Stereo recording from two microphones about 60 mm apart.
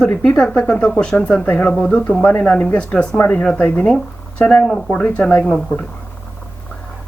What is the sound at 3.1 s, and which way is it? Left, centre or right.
Speech, left.